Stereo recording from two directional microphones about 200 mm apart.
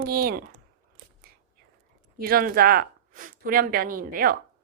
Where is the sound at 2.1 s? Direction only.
50° right (ahead or behind).